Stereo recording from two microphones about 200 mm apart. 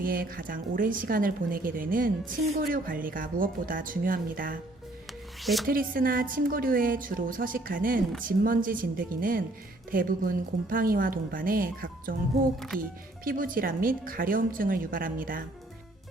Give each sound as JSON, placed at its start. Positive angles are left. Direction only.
{"t": 0.0, "sound": "a woman's voice", "side_deg": -45}
{"t": 5.4, "sound": "music", "side_deg": 0}
{"t": 5.6, "sound": "a woman's voice", "side_deg": -45}
{"t": 12.5, "sound": "speech", "side_deg": 0}
{"t": 13.2, "sound": "a woman's voice", "side_deg": -45}